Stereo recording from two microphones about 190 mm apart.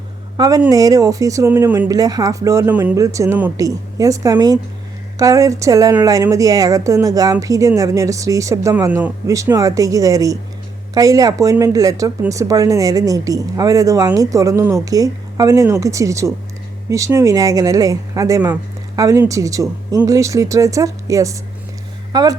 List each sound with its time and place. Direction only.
0.3 s speech: 20° right (ahead or behind)